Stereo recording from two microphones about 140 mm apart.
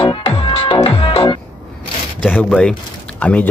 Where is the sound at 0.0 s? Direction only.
35° left (ahead or behind).